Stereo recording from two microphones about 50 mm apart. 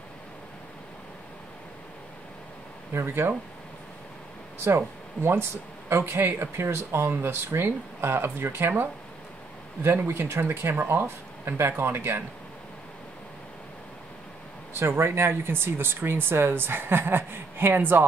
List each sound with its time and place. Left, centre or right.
2.9 s speech: right
4.6 s speech: right
9.8 s speech: right
14.7 s speech: right